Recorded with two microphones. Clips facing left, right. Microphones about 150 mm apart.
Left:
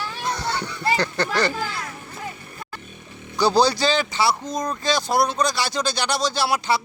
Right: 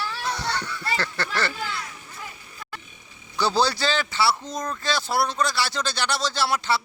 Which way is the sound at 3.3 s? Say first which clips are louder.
Left 4 dB; 15° left (ahead or behind).